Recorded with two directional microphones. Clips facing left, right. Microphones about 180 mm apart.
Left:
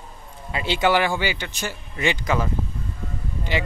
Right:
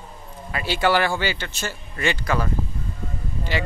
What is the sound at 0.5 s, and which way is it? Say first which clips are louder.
A man's voice: even; 20° left (ahead or behind).